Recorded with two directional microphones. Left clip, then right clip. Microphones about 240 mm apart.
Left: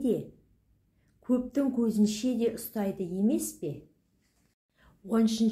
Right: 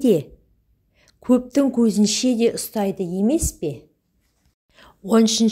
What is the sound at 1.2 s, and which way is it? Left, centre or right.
A woman's voice, right.